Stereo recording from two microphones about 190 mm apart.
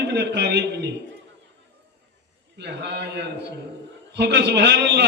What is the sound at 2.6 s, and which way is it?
A man's voice, 65° right (ahead or behind).